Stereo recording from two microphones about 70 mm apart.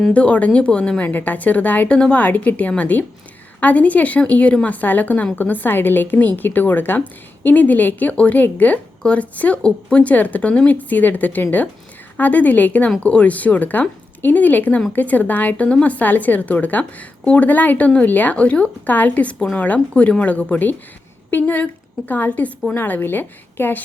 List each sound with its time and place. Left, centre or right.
0.1 s a woman's voice: centre